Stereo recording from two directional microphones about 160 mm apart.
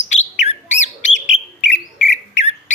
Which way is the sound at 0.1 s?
45° left (ahead or behind).